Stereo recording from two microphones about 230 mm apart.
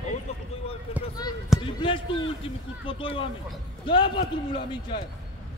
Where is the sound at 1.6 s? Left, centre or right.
Left.